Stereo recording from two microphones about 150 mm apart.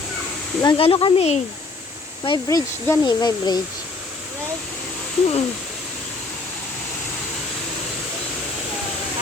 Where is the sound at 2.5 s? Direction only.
25° left (ahead or behind).